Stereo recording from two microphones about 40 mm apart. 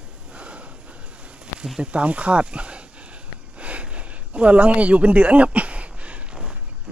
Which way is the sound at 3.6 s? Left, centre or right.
Right.